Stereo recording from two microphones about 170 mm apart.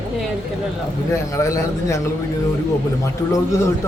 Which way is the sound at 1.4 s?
15° left (ahead or behind).